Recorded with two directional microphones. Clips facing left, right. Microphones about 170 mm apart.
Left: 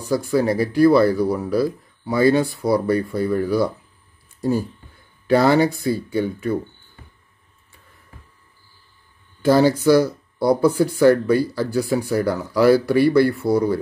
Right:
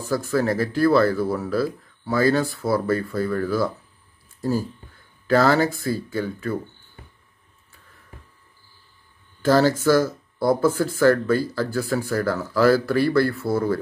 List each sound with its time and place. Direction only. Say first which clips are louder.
0.1 s speech: left 3 dB; 15° left (ahead or behind)
5.2 s speech: left 3 dB; 15° left (ahead or behind)
9.4 s speech: left 2 dB; 15° left (ahead or behind)